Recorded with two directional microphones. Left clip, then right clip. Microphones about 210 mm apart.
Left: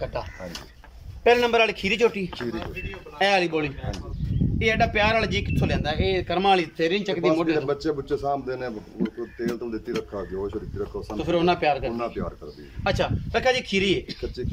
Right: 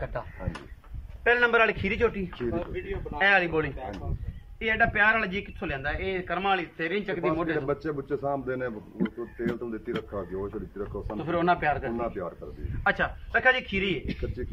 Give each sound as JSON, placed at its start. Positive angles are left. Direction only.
{"t": 1.2, "sound": "speech", "side_deg": 15}